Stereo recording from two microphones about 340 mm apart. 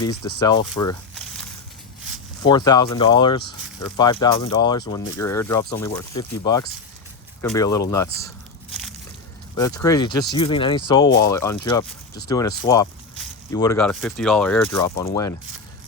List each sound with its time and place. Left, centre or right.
0.3 s speech: centre
2.4 s speech: centre
9.6 s speech: centre